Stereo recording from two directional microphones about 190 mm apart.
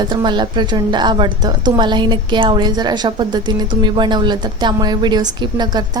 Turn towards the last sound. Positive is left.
turn(degrees=-20)  # may be behind; listen again after turning